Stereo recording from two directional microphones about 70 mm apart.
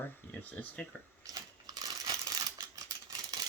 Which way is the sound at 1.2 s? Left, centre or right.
Right.